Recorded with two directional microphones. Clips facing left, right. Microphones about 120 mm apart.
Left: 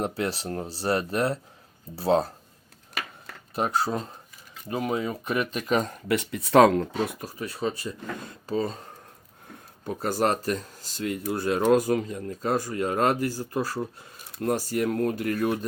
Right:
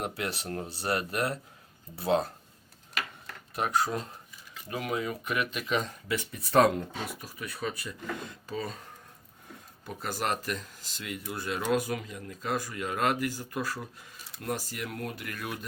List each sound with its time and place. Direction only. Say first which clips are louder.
0.2 s speech: left 5 dB; 30° left (ahead or behind)
3.5 s speech: left 3 dB; 30° left (ahead or behind)
6.1 s speech: left 7 dB; 80° left
7.2 s speech: left 6 dB; 35° left (ahead or behind)
9.8 s speech: left 8 dB; 45° left (ahead or behind)
14.3 s speech: left 9 dB; 45° left (ahead or behind)